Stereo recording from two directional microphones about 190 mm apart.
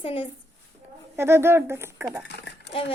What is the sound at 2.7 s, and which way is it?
Speech, 30° left (ahead or behind).